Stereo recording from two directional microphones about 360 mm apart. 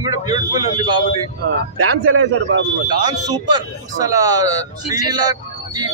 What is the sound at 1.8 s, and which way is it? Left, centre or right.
Speech, right.